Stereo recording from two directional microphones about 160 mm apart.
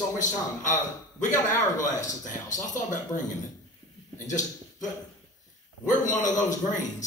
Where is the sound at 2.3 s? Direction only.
50° left (ahead or behind).